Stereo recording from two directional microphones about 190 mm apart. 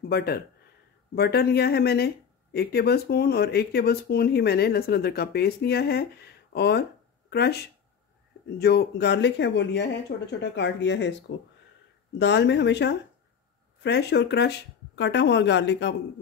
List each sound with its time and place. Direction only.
0.1 s speech: 55° left (ahead or behind)
8.5 s speech: 60° left (ahead or behind)